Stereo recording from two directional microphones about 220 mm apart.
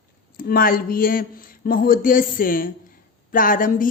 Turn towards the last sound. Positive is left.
turn(degrees=40)  # may be behind; listen again after turning